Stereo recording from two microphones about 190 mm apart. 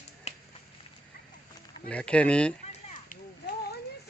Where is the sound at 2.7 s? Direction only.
40° left (ahead or behind).